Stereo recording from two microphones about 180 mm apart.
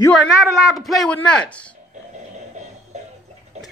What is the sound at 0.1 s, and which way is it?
A man's voice, 5° right (ahead or behind).